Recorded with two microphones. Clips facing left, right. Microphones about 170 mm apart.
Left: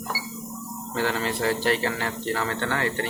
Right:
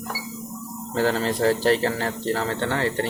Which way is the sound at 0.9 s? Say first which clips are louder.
Right 4 dB; 35° right (ahead or behind).